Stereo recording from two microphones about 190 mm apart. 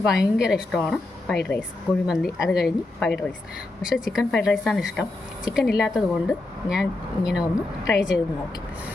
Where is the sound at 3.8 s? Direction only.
5° right (ahead or behind).